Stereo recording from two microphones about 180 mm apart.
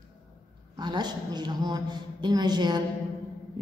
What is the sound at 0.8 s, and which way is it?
A woman's voice, 25° right (ahead or behind).